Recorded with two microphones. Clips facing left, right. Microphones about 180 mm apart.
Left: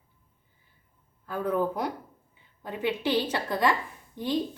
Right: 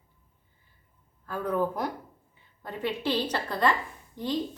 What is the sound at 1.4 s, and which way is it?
Speech, 5° left (ahead or behind).